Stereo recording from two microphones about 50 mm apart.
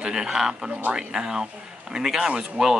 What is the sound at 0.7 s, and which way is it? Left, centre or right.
Speech, right.